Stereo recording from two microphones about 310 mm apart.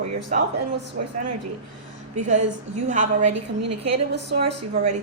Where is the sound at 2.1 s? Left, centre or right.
Right.